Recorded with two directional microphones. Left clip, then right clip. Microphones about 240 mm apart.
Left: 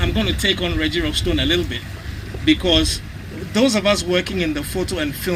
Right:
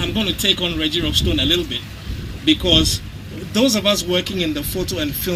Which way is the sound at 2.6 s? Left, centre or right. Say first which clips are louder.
Right 2 dB; right.